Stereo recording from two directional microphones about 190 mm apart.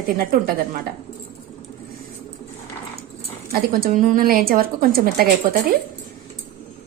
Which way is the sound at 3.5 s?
50° right (ahead or behind).